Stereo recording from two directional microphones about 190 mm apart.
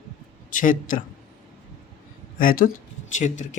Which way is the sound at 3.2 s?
40° left (ahead or behind).